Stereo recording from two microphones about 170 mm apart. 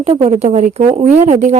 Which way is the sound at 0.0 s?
35° right (ahead or behind).